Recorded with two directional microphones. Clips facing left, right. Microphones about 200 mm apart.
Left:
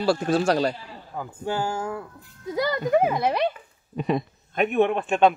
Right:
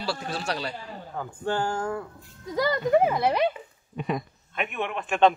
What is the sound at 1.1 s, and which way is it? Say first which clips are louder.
Speech: even; 10° left (ahead or behind).